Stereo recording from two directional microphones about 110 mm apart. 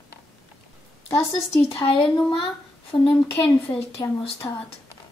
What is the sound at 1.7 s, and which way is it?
Speech, 50° left (ahead or behind).